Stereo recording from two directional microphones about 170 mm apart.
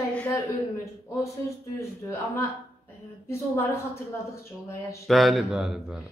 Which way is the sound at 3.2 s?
15° left (ahead or behind).